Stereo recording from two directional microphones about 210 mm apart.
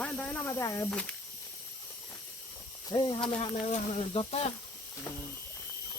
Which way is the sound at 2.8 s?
20° left (ahead or behind).